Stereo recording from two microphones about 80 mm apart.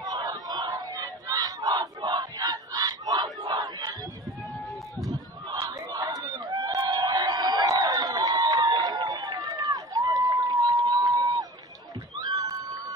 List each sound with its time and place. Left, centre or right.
0.0 s battle cry: right
5.5 s crowd: right
12.2 s a sound: right